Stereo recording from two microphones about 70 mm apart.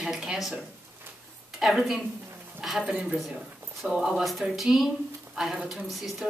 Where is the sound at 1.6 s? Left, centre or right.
Centre.